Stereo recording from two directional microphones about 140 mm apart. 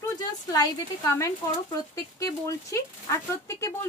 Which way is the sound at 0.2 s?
25° left (ahead or behind).